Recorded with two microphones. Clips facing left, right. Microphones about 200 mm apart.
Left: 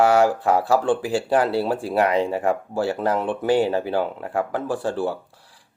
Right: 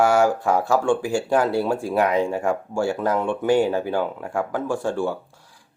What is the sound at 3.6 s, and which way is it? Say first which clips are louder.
Speech: even; 5° left (ahead or behind).